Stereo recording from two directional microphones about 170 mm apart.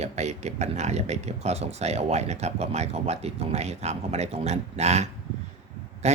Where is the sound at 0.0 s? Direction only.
40° right (ahead or behind).